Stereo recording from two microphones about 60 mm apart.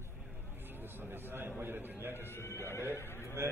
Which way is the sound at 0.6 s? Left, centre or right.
Right.